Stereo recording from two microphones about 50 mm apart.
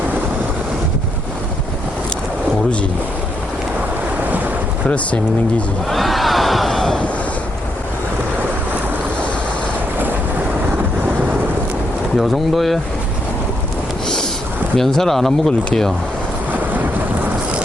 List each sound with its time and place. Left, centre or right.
4.2 s ocean: right
5.9 s a sound: centre
12.1 s speech: centre
14.8 s speech: centre